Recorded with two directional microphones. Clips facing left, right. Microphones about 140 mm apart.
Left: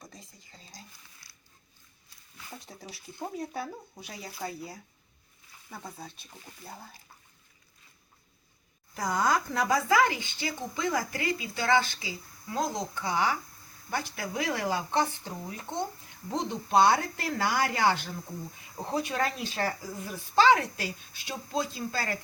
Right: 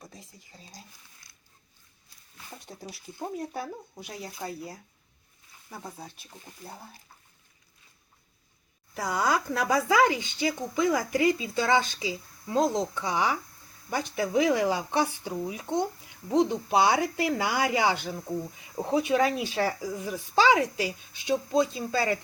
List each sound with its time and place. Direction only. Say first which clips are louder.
3.5 s speech: right 1 dB; centre (ahead or behind)
9.0 s speech: even; 10° right (ahead or behind)